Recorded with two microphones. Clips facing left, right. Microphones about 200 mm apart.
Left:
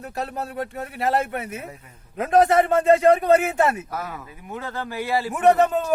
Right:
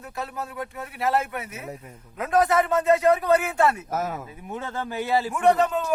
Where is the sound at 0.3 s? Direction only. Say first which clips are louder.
Left 4 dB; 60° left (ahead or behind).